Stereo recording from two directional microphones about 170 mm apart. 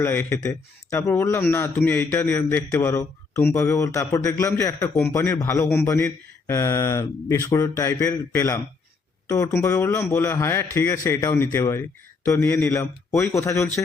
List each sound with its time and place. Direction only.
0.0 s a man's voice: 10° left (ahead or behind)